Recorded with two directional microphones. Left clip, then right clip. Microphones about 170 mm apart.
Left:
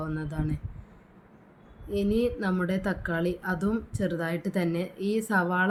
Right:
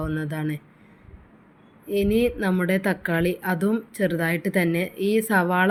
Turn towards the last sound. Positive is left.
turn(degrees=-20)  # may be behind; listen again after turning